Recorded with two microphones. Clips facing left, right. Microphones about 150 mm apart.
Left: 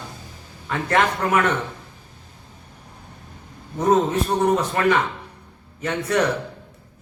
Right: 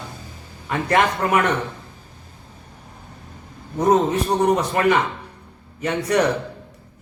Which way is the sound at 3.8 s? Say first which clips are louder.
Right 1 dB; 15° right (ahead or behind).